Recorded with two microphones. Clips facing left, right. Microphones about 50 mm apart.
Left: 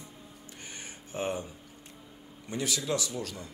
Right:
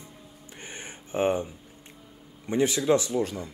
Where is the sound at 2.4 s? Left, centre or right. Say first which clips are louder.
Right 9 dB; right.